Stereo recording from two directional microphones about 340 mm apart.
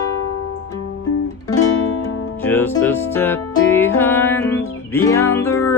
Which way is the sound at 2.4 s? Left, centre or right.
Centre.